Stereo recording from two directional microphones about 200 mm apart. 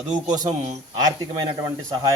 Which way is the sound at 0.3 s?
20° right (ahead or behind).